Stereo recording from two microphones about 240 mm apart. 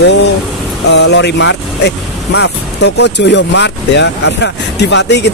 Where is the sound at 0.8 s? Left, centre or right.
Left.